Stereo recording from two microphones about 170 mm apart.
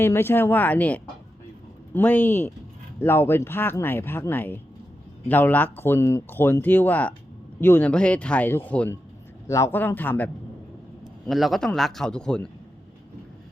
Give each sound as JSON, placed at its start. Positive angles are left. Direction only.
{"t": 0.0, "sound": "speech", "side_deg": 15}
{"t": 11.3, "sound": "speech", "side_deg": 0}